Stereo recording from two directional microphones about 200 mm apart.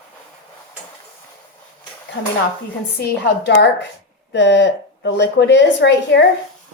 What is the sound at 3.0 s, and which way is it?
A woman's voice, 55° left (ahead or behind).